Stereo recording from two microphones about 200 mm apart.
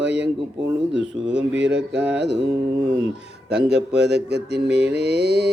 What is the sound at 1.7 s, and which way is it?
Mantra, 5° right (ahead or behind).